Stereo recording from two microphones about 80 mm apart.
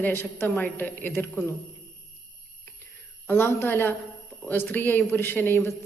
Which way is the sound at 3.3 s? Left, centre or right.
Left.